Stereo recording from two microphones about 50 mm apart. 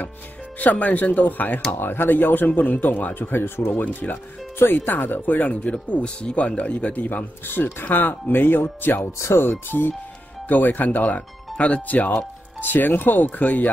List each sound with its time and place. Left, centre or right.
0.6 s speech: left
3.2 s speech: left
3.7 s speech: left
9.0 s speech: left
9.4 s speech: left
12.2 s speech: left